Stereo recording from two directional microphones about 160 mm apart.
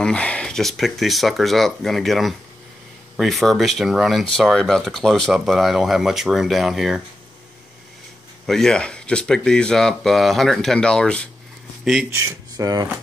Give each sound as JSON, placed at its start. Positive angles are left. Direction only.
{"t": 0.0, "sound": "speech", "side_deg": 5}
{"t": 8.5, "sound": "speech", "side_deg": 5}
{"t": 12.1, "sound": "speech", "side_deg": -20}